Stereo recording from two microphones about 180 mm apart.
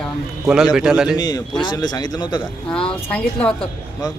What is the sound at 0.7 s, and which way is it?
Speech, 5° right (ahead or behind).